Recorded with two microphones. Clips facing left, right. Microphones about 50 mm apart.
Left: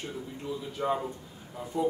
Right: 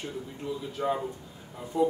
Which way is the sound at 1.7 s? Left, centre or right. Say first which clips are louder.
Right 3 dB; right.